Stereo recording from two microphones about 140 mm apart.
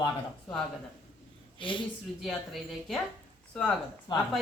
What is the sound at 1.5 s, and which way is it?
Speech, 35° left (ahead or behind).